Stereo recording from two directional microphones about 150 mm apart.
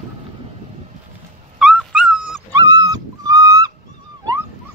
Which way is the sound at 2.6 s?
30° right (ahead or behind).